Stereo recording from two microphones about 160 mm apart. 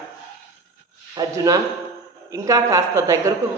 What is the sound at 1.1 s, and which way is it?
A woman's voice, 20° right (ahead or behind).